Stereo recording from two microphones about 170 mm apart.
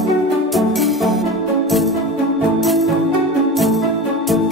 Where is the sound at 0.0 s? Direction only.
Centre (ahead or behind).